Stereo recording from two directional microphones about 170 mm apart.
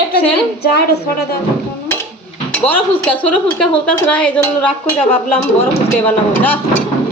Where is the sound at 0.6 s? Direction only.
75° left (ahead or behind).